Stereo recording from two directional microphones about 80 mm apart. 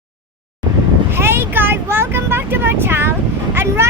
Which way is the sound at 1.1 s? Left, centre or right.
Right.